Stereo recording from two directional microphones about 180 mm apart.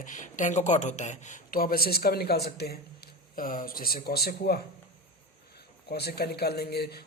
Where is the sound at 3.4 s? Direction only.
50° left (ahead or behind).